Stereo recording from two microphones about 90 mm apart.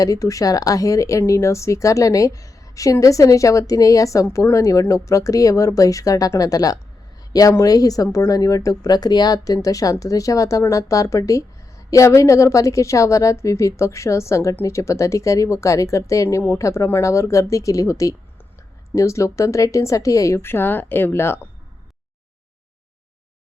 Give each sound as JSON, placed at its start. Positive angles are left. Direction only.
{"t": 0.0, "sound": "a woman's voice", "side_deg": 40}